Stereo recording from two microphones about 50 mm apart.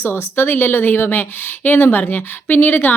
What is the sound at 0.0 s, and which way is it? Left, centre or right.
Speech, left.